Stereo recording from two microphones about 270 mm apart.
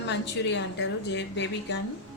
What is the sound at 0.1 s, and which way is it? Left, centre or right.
Speech, left.